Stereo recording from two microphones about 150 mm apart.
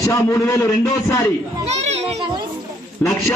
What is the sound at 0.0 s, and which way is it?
A man's voice, 20° left (ahead or behind).